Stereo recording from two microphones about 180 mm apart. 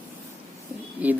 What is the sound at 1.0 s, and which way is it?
Speech, 5° right (ahead or behind).